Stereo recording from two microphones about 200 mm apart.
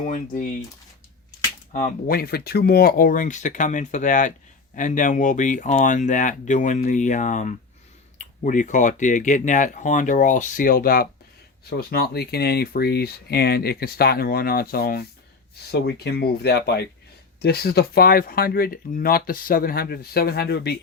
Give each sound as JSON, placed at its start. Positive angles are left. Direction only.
{"t": 0.0, "sound": "speech", "side_deg": 40}
{"t": 1.7, "sound": "speech", "side_deg": 45}